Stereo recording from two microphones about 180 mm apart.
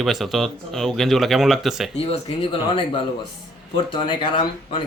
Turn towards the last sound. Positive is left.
turn(degrees=30)  # may be behind; listen again after turning